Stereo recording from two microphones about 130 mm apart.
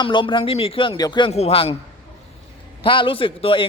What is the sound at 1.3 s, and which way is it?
Speech, 50° left (ahead or behind).